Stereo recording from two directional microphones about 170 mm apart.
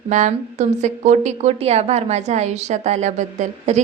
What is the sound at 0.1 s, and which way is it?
A woman's voice, 45° right (ahead or behind).